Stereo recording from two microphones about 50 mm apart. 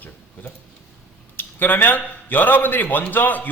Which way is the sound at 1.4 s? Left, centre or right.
Left.